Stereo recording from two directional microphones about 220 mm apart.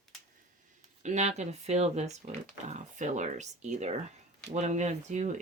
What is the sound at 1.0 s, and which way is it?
Speech, 30° right (ahead or behind).